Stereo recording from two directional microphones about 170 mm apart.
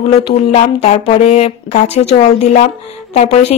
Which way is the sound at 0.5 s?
40° left (ahead or behind).